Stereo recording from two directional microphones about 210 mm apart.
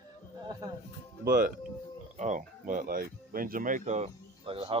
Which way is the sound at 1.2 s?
40° right (ahead or behind).